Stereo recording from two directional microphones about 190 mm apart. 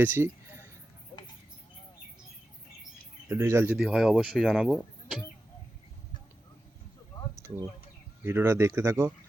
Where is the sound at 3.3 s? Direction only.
15° right (ahead or behind).